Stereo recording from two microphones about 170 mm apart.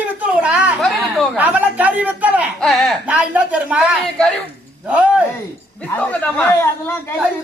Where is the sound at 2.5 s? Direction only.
5° left (ahead or behind).